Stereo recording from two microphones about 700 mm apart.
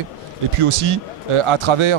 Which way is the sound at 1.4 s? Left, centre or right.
Right.